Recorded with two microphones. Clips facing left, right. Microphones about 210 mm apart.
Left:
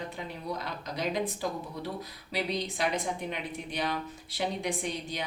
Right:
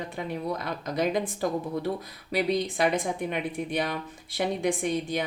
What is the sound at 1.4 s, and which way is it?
Speech, 50° right (ahead or behind).